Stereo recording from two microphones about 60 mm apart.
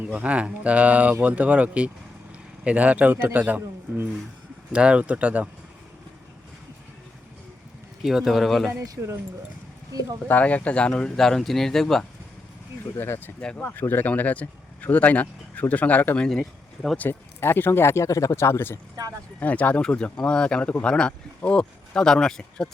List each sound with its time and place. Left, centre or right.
0.0 s speech: right
4.7 s speech: centre
8.0 s speech: centre
10.2 s speech: left; by 12.0 s centre
13.0 s speech: left
16.1 s speech: centre
17.0 s speech: left
19.4 s speech: left